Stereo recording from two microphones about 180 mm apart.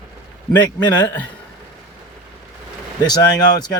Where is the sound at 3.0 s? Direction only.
20° left (ahead or behind).